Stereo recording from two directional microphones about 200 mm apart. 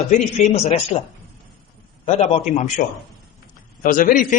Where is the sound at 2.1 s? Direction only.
30° left (ahead or behind).